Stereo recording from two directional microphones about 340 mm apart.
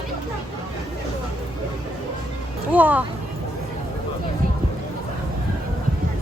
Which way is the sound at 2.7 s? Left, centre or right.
Centre.